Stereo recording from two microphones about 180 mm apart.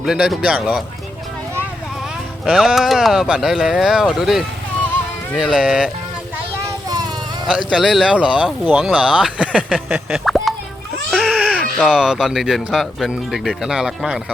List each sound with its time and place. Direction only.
0.0 s speech: 5° right (ahead or behind)
2.5 s speech: centre (ahead or behind)
6.8 s a sound: 20° right (ahead or behind)
7.7 s speech: centre (ahead or behind)
11.1 s baby cry: centre (ahead or behind)
11.9 s speech: 5° right (ahead or behind)